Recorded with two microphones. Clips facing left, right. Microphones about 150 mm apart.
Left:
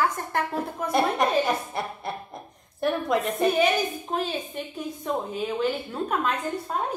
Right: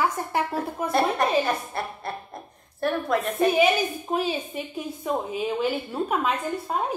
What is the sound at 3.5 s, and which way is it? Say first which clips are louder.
A woman's voice: right 2 dB; 10° right (ahead or behind).